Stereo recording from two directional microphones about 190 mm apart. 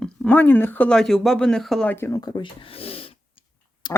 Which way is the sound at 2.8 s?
30° left (ahead or behind).